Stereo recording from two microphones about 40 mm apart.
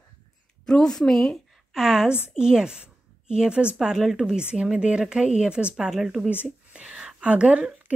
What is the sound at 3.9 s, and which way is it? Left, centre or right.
Speech, centre.